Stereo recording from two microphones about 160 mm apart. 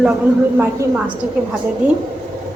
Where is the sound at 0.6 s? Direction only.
15° right (ahead or behind).